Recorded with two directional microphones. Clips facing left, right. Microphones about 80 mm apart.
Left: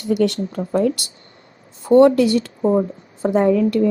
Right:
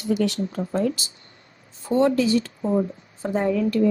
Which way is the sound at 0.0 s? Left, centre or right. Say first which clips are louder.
Left 5 dB; left.